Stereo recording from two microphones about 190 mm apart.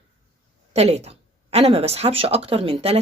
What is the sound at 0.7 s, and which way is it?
Speech, 35° right (ahead or behind).